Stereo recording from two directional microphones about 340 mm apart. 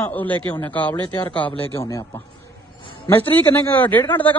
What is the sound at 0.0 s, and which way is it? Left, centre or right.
A man's voice, centre.